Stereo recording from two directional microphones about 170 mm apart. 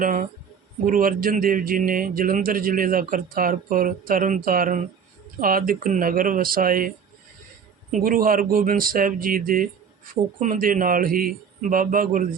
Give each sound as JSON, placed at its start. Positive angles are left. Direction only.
{"t": 0.0, "sound": "a man's voice", "side_deg": -50}
{"t": 8.0, "sound": "a man's voice", "side_deg": -55}